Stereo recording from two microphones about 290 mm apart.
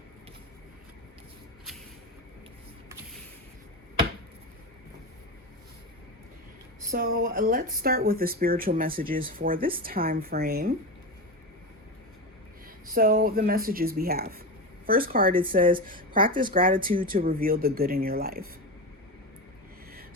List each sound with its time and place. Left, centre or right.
6.9 s speech: right
12.9 s speech: right
16.4 s speech: right